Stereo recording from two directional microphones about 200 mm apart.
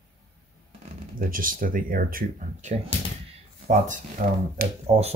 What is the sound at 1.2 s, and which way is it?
Speech, 45° right (ahead or behind).